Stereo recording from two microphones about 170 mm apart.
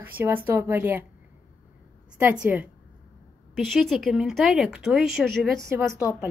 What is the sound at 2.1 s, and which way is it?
A woman's voice, 10° right (ahead or behind).